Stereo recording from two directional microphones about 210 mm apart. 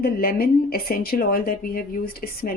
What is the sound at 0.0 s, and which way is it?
Speech, 45° left (ahead or behind).